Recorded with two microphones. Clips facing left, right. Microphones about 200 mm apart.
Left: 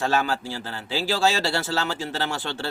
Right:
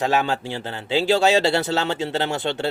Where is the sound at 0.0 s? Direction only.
20° right (ahead or behind).